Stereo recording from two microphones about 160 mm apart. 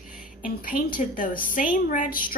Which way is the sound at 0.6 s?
60° left (ahead or behind).